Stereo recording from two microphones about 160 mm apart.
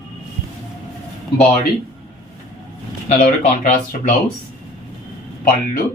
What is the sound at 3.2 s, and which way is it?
Speech, 50° left (ahead or behind).